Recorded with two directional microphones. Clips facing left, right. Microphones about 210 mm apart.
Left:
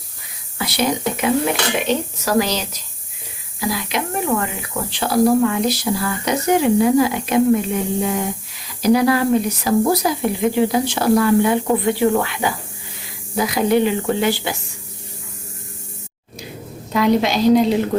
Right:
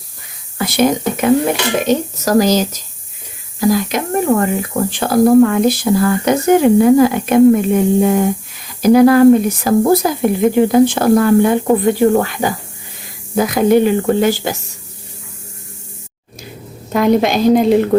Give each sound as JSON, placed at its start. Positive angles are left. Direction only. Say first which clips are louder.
{"t": 0.6, "sound": "speech", "louder": "right 6 dB", "side_deg": -50}
{"t": 16.9, "sound": "speech", "louder": "right 4 dB", "side_deg": -50}